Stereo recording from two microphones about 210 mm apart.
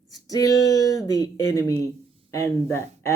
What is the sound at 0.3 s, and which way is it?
Speech, 15° left (ahead or behind).